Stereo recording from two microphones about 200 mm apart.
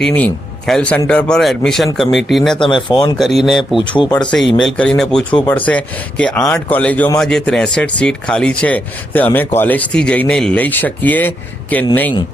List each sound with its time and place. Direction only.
0.0 s speech: 5° left (ahead or behind)
2.6 s speech: 25° left (ahead or behind)
3.2 s speech: centre (ahead or behind)
3.8 s speech: 25° left (ahead or behind)
4.3 s a man's voice: centre (ahead or behind)